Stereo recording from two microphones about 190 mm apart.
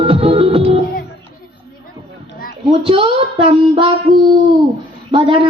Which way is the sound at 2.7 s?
30° right (ahead or behind).